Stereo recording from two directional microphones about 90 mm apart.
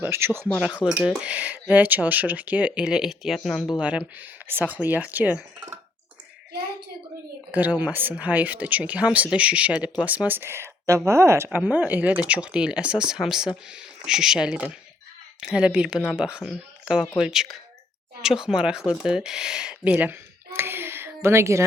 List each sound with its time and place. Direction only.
0.0 s speech: 25° right (ahead or behind)
0.5 s speech: 10° right (ahead or behind)
3.8 s speech: 15° right (ahead or behind)
7.5 s speech: 20° right (ahead or behind)
11.4 s speech: 20° right (ahead or behind)